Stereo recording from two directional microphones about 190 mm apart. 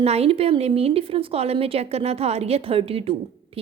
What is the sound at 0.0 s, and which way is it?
A woman's voice, 35° right (ahead or behind).